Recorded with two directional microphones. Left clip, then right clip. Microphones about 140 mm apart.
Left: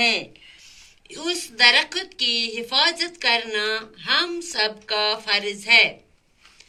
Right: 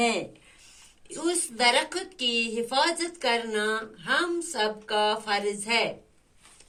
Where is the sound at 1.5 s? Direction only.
30° right (ahead or behind).